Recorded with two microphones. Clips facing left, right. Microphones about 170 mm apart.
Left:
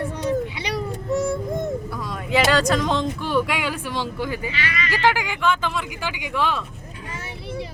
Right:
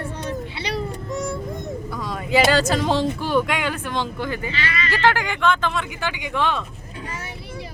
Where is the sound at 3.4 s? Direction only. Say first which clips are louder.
Right 1 dB; 5° left (ahead or behind).